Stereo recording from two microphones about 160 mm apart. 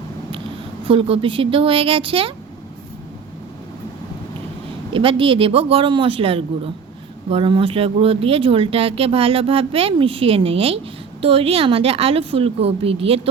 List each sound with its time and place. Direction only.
0.9 s speech: 35° right (ahead or behind)
4.9 s speech: 35° right (ahead or behind)